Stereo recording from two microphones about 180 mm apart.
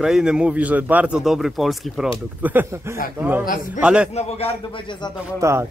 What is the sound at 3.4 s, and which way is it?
Speech, 50° left (ahead or behind).